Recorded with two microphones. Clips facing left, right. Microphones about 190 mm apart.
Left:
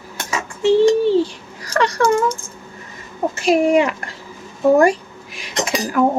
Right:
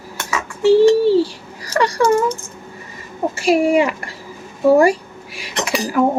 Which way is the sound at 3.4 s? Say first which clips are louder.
Even; 10° right (ahead or behind).